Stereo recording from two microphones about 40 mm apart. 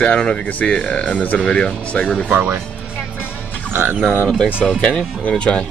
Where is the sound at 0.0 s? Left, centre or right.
Left.